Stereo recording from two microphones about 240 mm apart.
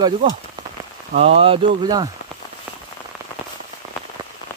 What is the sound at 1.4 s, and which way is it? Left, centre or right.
Speech, centre.